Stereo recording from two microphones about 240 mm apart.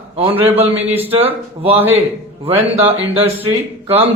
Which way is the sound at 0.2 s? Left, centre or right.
Right.